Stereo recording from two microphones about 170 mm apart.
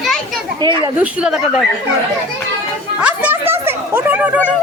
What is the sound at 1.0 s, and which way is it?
Speech, 5° right (ahead or behind).